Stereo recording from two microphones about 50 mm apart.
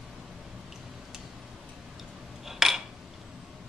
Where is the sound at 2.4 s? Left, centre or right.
Centre.